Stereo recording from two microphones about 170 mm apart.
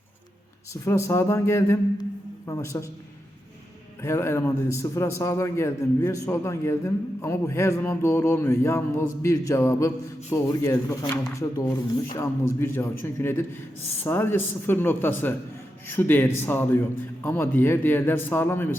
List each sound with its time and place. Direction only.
0.7 s a man's voice: 15° left (ahead or behind)
4.0 s a man's voice: 15° left (ahead or behind)